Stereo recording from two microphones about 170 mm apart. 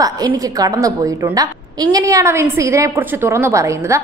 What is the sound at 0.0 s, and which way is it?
A woman's voice, 20° right (ahead or behind).